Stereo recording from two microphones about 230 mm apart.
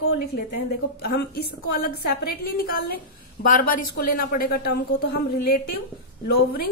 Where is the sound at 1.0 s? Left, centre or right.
Left.